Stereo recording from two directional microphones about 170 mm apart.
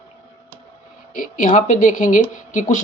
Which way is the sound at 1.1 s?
50° left (ahead or behind).